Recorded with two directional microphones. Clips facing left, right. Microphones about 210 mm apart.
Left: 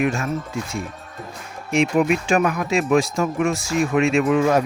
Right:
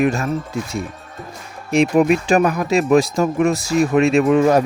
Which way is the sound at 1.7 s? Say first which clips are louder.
Right 4 dB; 35° right (ahead or behind).